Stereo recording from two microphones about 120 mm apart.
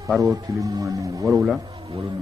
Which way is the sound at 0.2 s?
30° right (ahead or behind).